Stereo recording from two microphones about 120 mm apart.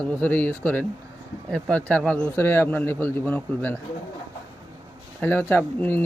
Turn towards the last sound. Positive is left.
turn(degrees=15)  # may be behind; listen again after turning